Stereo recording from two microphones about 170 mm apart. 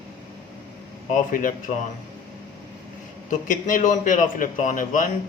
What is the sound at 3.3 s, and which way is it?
Speech, 50° left (ahead or behind).